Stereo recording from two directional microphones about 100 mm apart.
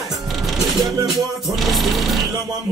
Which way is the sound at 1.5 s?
Centre (ahead or behind).